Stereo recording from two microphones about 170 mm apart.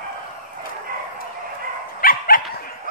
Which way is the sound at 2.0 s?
55° left (ahead or behind).